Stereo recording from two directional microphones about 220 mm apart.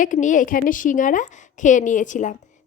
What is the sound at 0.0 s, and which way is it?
A woman's voice, 35° left (ahead or behind).